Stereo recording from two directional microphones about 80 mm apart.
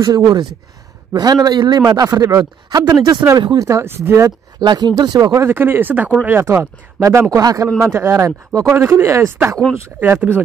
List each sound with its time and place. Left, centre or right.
0.0 s a man's voice: right
2.0 s a man's voice: right
3.6 s speech: right
4.6 s a man's voice: right
5.4 s speech: right
6.4 s speech: right
7.8 s speech: right
9.9 s speech: right